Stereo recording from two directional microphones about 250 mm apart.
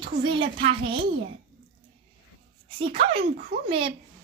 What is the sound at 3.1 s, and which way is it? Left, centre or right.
Speech, right.